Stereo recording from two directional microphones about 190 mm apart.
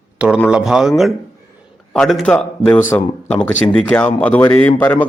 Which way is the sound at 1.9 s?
Centre (ahead or behind).